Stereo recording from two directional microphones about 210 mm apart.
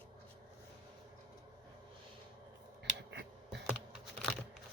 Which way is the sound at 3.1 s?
55° right (ahead or behind).